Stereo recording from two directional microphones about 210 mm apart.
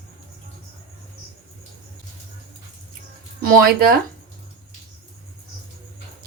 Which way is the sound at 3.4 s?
45° right (ahead or behind).